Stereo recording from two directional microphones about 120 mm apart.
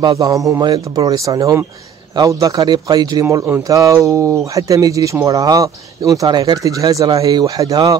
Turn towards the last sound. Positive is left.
turn(degrees=-30)  # may be behind; listen again after turning